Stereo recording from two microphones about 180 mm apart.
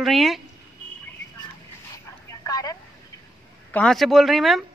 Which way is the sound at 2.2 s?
20° left (ahead or behind).